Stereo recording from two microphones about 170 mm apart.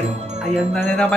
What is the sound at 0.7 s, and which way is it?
Speech, 5° left (ahead or behind).